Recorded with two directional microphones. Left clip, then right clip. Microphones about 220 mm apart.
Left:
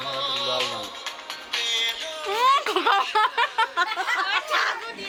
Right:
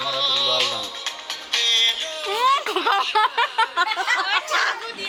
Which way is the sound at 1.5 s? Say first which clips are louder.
Right 6 dB; 15° right (ahead or behind).